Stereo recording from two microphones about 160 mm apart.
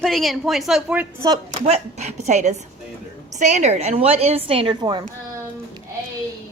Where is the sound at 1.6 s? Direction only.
45° right (ahead or behind); by 5.0 s 30° right (ahead or behind).